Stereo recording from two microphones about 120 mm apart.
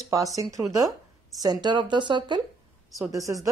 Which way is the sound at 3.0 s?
25° right (ahead or behind).